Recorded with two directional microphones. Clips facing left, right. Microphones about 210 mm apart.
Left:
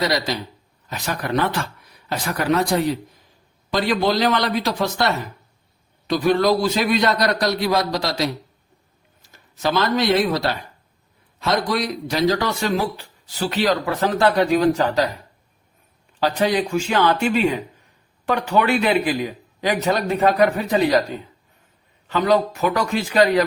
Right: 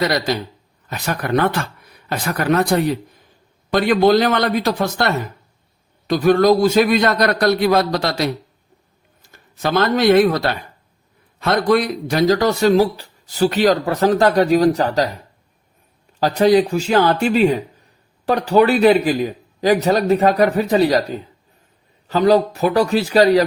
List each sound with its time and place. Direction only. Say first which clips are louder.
0.9 s a man's voice: right 4 dB; 55° right (ahead or behind)
3.7 s a man's voice: right 6 dB; 55° right (ahead or behind)
16.2 s a man's voice: right 6 dB; 40° right (ahead or behind)